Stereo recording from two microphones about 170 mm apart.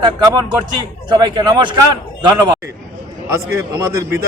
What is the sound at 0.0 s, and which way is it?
A man's voice, 25° right (ahead or behind).